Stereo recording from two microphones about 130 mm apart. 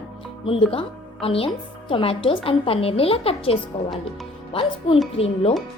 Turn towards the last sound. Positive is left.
turn(degrees=45)  # may be behind; listen again after turning